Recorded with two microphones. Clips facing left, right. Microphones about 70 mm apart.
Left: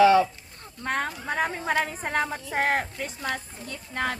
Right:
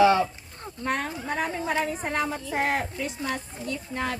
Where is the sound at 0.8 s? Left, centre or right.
Left.